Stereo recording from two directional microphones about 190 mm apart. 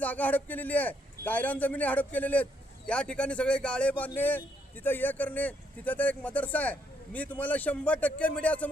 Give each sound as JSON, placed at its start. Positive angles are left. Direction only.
{"t": 0.0, "sound": "a man's voice", "side_deg": 10}